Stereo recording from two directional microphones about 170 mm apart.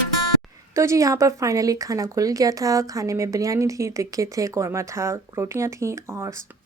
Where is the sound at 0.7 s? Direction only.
15° right (ahead or behind).